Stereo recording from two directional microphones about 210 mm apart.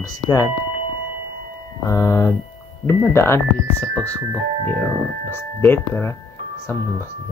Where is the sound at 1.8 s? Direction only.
15° left (ahead or behind).